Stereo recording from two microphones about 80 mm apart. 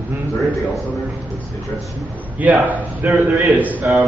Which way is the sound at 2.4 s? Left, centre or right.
Centre.